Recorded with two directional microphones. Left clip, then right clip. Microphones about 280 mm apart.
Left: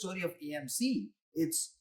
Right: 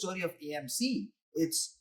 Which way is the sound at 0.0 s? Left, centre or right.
Centre.